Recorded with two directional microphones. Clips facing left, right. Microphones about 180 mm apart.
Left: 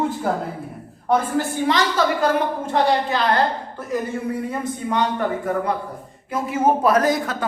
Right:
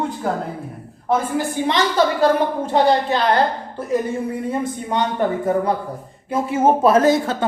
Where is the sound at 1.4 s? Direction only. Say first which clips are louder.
Even; 15° right (ahead or behind).